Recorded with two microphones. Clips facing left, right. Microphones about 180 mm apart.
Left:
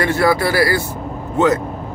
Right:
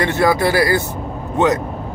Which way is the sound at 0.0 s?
20° right (ahead or behind).